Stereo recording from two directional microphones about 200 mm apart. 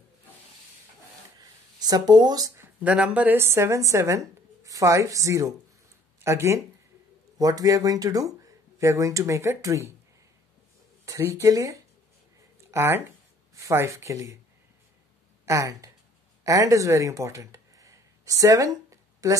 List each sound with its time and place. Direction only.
1.8 s speech: 20° right (ahead or behind)
11.1 s speech: 15° right (ahead or behind)
15.4 s speech: 15° right (ahead or behind)